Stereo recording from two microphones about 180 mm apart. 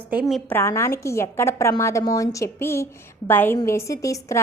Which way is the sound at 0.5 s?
15° left (ahead or behind).